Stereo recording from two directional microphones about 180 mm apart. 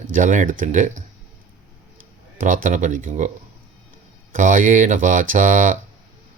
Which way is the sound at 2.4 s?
45° right (ahead or behind).